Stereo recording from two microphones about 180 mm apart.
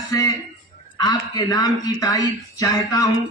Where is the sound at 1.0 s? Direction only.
20° left (ahead or behind).